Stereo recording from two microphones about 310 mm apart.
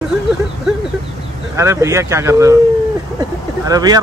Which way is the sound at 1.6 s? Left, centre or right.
Centre.